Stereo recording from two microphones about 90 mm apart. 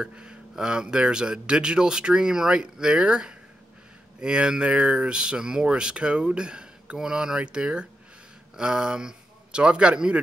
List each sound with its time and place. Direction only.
0.0 s a man's voice: 10° right (ahead or behind)